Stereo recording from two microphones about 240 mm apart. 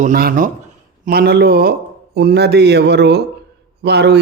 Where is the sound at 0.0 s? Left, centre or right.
Right.